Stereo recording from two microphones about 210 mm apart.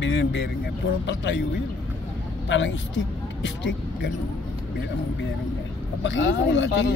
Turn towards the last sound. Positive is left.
turn(degrees=60)  # may be behind; listen again after turning